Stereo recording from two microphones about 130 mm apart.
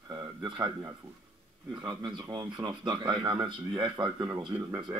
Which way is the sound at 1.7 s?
35° right (ahead or behind).